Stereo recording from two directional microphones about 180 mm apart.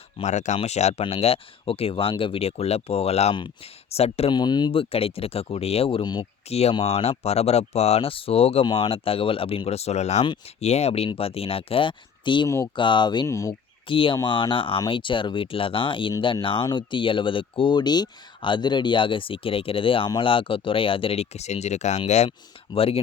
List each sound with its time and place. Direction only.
0.2 s speech: 40° left (ahead or behind); by 6.2 s 25° left (ahead or behind)
6.5 s speech: 35° left (ahead or behind); by 13.6 s 15° left (ahead or behind)
13.8 s speech: 30° left (ahead or behind)